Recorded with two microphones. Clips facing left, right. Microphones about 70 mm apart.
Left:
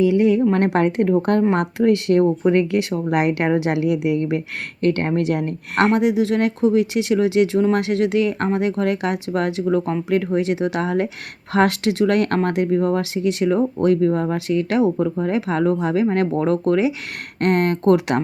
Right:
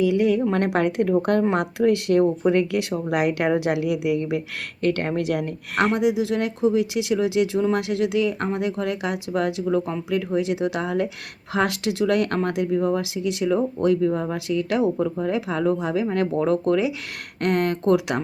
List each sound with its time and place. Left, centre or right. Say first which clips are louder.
0.0 s speech: left 4 dB; left
14.9 s speech: left 3 dB; centre
15.4 s speech: left 3 dB; left